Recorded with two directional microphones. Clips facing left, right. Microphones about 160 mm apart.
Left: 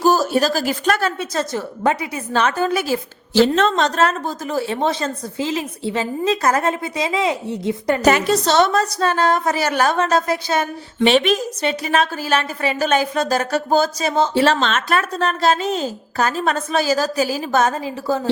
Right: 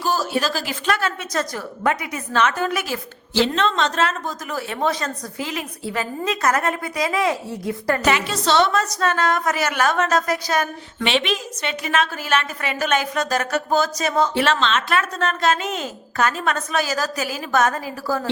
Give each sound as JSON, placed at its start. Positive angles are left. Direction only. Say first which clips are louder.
{"t": 0.0, "sound": "speech", "louder": "left 6 dB", "side_deg": 40}
{"t": 1.3, "sound": "a woman's voice", "louder": "left 3 dB", "side_deg": 30}
{"t": 3.4, "sound": "a woman's voice", "louder": "left 4 dB", "side_deg": 45}
{"t": 4.5, "sound": "a woman's voice", "louder": "left 3 dB", "side_deg": 30}
{"t": 8.0, "sound": "a woman's voice", "louder": "left 7 dB", "side_deg": 40}
{"t": 11.0, "sound": "a woman's voice", "louder": "left 7 dB", "side_deg": 45}
{"t": 14.6, "sound": "a woman's voice", "louder": "left 1 dB", "side_deg": 45}